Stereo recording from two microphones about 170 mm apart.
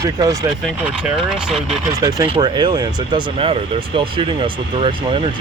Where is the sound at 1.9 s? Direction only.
20° right (ahead or behind).